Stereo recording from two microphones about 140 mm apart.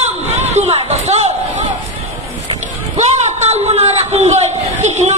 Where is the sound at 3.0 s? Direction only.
50° right (ahead or behind).